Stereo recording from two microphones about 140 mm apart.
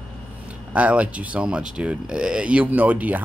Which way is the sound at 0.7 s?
10° right (ahead or behind).